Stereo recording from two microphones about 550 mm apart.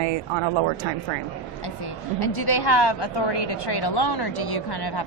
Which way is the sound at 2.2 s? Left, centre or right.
Left.